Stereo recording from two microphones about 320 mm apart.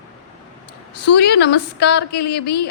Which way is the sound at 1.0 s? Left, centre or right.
Left.